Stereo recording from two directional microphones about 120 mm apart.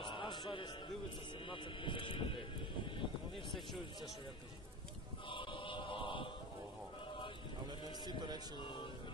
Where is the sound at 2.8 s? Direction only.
45° left (ahead or behind).